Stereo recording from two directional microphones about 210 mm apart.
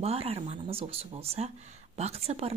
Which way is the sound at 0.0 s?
30° right (ahead or behind).